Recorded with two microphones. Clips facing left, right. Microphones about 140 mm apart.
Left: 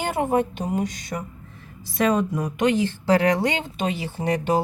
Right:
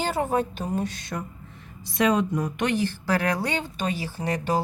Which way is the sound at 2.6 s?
20° left (ahead or behind).